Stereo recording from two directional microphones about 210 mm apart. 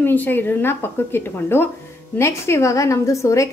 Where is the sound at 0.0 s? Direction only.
10° left (ahead or behind).